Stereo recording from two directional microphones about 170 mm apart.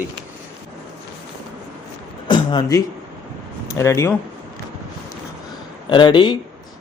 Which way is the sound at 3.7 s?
15° left (ahead or behind).